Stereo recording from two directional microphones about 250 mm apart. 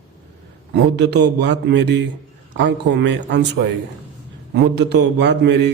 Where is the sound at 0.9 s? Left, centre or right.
Right.